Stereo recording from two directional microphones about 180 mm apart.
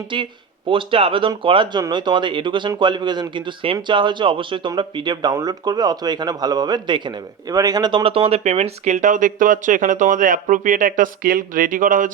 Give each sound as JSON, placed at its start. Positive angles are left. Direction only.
{"t": 0.7, "sound": "speech", "side_deg": -30}